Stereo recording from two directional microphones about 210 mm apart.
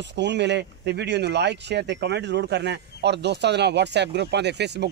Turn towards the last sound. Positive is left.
turn(degrees=-55)  # may be behind; listen again after turning